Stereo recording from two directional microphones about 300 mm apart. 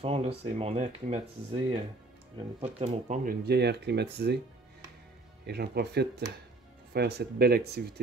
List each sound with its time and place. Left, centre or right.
0.0 s speech: centre
5.5 s speech: right